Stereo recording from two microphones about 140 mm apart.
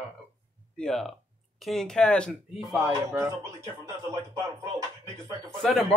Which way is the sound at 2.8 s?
20° right (ahead or behind).